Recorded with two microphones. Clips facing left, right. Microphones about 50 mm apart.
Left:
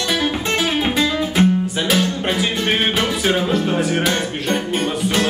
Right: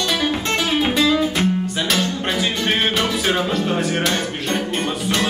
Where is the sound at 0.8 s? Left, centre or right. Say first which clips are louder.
Right 2 dB; centre.